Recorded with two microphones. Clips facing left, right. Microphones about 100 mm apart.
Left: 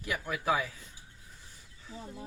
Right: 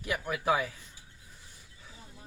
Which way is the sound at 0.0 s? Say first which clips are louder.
Right 2 dB; 15° right (ahead or behind).